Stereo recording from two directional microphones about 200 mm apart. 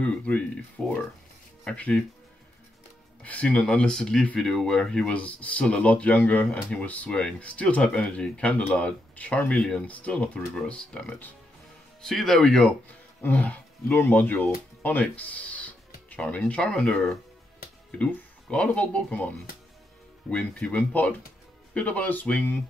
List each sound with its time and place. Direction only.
0.0 s speech: 5° left (ahead or behind)
3.2 s speech: 5° left (ahead or behind)